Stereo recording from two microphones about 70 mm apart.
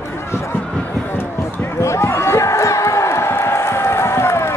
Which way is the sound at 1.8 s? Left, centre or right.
Left.